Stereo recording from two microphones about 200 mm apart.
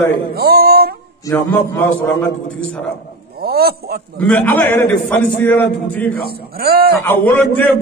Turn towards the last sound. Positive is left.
turn(degrees=10)  # may be behind; listen again after turning